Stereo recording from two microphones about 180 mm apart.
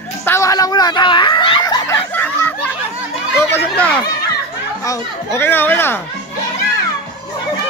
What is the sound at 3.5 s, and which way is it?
A child's voice, 10° left (ahead or behind).